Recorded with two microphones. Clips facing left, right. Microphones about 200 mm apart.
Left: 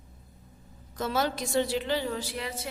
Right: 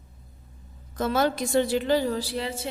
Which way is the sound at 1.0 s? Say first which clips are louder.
Right 5 dB; 55° right (ahead or behind).